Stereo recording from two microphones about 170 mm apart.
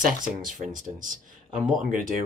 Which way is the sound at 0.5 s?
50° right (ahead or behind).